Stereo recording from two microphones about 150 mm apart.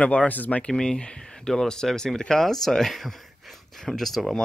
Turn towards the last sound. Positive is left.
turn(degrees=0)  # may be behind; listen again after turning